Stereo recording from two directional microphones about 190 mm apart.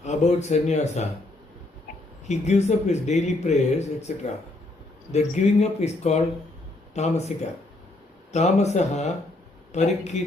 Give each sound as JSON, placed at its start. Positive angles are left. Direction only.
{"t": 0.0, "sound": "speech", "side_deg": 35}
{"t": 2.2, "sound": "speech", "side_deg": 35}
{"t": 5.1, "sound": "speech", "side_deg": 35}